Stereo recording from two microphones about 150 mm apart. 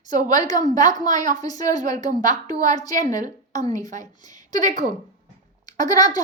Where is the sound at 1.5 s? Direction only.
55° right (ahead or behind).